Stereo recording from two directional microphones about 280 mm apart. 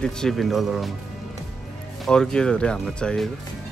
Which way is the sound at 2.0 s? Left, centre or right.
Centre.